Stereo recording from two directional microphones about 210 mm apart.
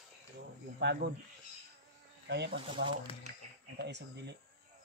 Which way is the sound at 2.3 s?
55° right (ahead or behind).